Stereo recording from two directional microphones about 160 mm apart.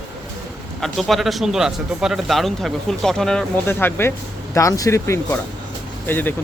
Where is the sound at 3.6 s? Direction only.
15° left (ahead or behind).